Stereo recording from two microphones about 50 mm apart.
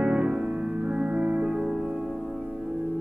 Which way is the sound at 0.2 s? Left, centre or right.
Right.